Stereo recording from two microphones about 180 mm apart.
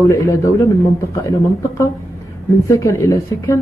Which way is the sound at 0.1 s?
15° left (ahead or behind).